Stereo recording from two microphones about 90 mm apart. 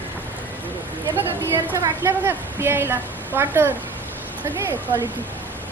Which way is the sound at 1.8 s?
35° right (ahead or behind).